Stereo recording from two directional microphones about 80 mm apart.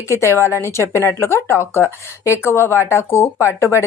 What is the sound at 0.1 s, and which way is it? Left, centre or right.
A woman's voice, left.